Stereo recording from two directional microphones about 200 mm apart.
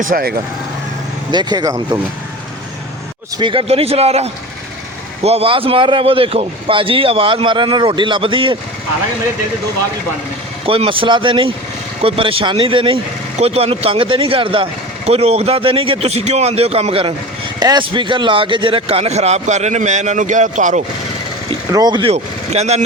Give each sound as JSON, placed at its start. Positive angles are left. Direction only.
{"t": 0.0, "sound": "speech", "side_deg": -45}
{"t": 1.3, "sound": "speech", "side_deg": -20}
{"t": 3.3, "sound": "speech", "side_deg": -25}
{"t": 10.7, "sound": "speech", "side_deg": -25}
{"t": 21.7, "sound": "speech", "side_deg": -20}
{"t": 22.1, "sound": "speech", "side_deg": -35}